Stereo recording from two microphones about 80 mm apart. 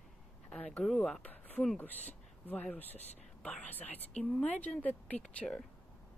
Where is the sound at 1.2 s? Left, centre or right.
Left.